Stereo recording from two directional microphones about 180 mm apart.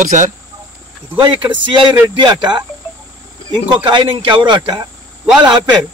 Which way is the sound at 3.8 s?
25° right (ahead or behind).